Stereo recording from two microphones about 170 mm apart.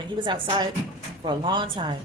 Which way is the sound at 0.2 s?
30° right (ahead or behind).